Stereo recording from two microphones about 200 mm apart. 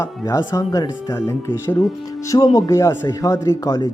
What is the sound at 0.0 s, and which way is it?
A man's voice, 15° left (ahead or behind).